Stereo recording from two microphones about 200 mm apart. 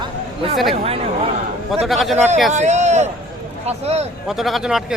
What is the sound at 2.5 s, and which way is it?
A man's voice, 35° right (ahead or behind).